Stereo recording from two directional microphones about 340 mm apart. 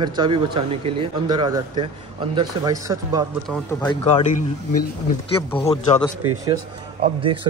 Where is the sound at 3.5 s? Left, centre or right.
Centre.